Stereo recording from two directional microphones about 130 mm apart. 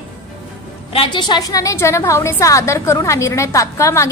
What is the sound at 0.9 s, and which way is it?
A woman's voice, 40° left (ahead or behind).